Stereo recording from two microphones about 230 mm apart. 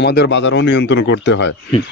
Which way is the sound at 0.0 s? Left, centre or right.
Left.